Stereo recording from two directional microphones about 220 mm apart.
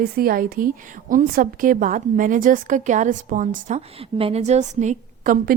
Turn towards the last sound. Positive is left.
turn(degrees=-40)  # may be behind; listen again after turning